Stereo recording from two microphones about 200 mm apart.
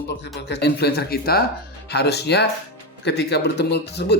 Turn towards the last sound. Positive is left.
turn(degrees=55)  # may be behind; listen again after turning